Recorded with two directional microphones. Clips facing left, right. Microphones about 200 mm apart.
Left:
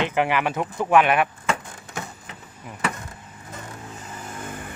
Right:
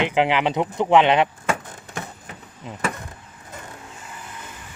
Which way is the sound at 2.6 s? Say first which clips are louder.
Right 4 dB; 20° right (ahead or behind).